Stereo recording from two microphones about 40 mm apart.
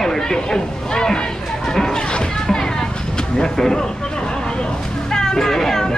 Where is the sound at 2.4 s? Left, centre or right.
Centre.